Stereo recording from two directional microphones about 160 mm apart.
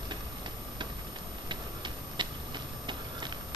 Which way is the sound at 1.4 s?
30° right (ahead or behind).